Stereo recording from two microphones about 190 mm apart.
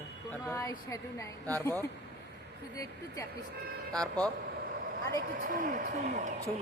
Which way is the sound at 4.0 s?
20° right (ahead or behind).